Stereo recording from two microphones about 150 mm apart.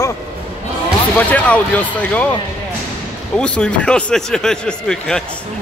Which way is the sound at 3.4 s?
5° left (ahead or behind).